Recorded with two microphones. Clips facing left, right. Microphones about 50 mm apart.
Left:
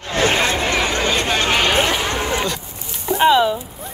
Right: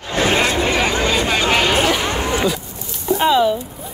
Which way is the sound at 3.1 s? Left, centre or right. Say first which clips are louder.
Left 2 dB; left.